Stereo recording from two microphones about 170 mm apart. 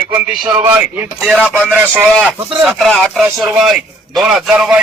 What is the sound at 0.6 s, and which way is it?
Speech, 10° right (ahead or behind).